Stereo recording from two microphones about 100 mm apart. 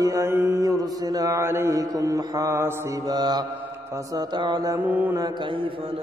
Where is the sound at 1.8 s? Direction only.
35° right (ahead or behind).